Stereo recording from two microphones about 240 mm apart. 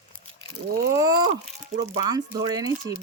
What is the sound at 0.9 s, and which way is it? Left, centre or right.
Speech, centre.